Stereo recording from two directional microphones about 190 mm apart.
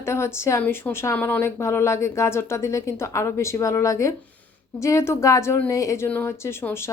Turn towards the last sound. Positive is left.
turn(degrees=15)  # may be behind; listen again after turning